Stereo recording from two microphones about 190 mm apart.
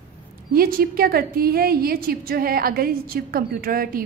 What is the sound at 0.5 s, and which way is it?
A woman's voice, 50° right (ahead or behind).